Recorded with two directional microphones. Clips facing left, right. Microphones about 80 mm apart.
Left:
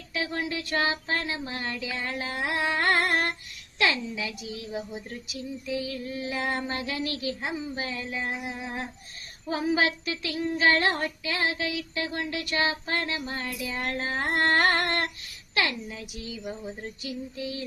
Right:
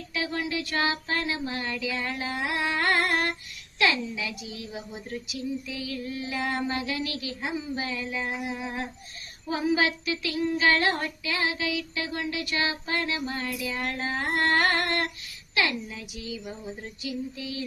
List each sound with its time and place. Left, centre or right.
0.1 s child singing: left
2.3 s a sound: left
3.8 s child singing: left
7.8 s a sound: left
9.5 s child singing: left
17.0 s child singing: left